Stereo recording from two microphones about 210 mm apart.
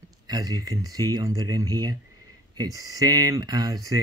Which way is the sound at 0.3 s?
20° right (ahead or behind).